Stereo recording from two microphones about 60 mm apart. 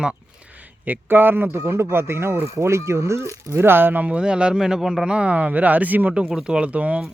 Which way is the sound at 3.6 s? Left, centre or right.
Right.